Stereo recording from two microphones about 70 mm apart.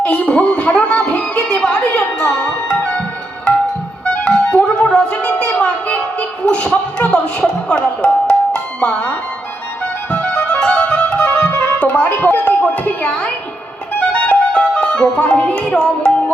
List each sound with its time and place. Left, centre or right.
0.0 s music: centre
4.0 s music: centre
12.0 s a sound: left
14.1 s music: centre